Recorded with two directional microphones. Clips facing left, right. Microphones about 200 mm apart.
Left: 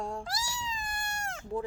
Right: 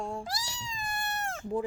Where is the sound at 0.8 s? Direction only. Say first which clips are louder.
Right 3 dB; 30° right (ahead or behind).